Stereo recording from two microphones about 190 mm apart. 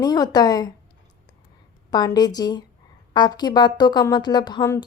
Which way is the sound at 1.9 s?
20° left (ahead or behind).